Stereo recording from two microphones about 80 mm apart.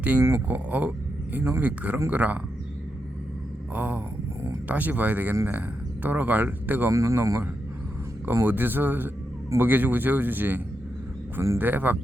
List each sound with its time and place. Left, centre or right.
0.0 s speech: centre
3.8 s speech: right
6.9 s speech: right